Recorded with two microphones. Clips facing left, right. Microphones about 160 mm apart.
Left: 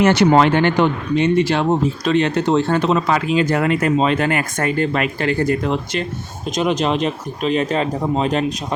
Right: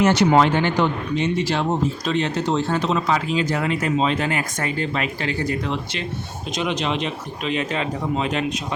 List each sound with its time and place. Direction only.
0.0 s speech: 60° left (ahead or behind); by 8.5 s 40° left (ahead or behind)